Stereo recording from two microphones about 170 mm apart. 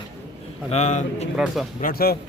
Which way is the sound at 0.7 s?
40° left (ahead or behind).